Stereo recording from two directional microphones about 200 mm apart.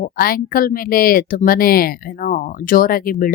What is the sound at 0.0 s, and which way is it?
Speech, 45° left (ahead or behind).